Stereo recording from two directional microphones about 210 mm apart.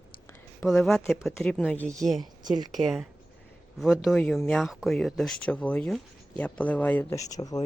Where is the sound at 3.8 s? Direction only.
Centre (ahead or behind).